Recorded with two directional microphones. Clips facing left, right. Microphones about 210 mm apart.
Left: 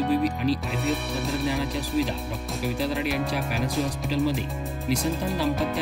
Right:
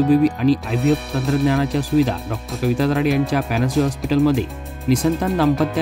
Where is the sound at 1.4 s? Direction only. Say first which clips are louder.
Right 8 dB; 90° right.